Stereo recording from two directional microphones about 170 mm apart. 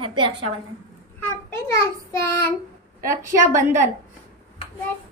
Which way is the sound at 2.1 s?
15° left (ahead or behind).